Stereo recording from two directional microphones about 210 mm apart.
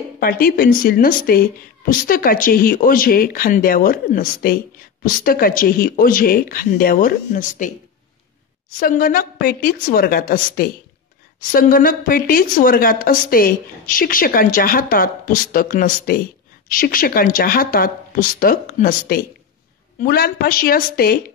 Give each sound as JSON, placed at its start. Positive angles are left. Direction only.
{"t": 0.2, "sound": "a woman's voice", "side_deg": 45}
{"t": 8.7, "sound": "a woman's voice", "side_deg": 40}